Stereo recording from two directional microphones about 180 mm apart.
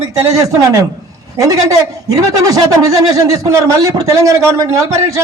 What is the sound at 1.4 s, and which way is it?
A man's voice, 20° right (ahead or behind).